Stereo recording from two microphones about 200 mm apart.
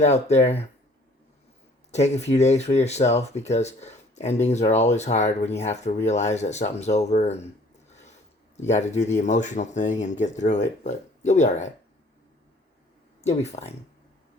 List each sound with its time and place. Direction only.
0.0 s speech: 35° left (ahead or behind)
1.9 s speech: 35° left (ahead or behind)
8.5 s speech: 35° left (ahead or behind)
13.2 s speech: 35° left (ahead or behind)